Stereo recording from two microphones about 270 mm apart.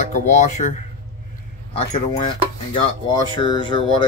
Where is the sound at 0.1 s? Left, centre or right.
Left.